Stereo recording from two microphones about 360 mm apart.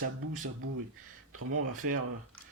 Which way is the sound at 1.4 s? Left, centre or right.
Right.